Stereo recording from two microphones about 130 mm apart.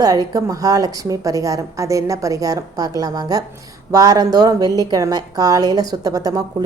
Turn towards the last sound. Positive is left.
turn(degrees=-25)  # may be behind; listen again after turning